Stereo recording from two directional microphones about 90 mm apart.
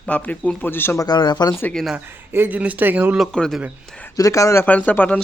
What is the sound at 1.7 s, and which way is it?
Speech, centre (ahead or behind).